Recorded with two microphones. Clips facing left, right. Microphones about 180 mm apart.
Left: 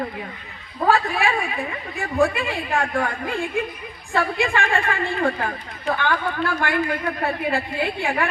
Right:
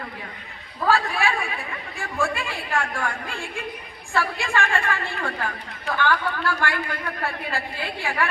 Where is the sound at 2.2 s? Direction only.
20° left (ahead or behind).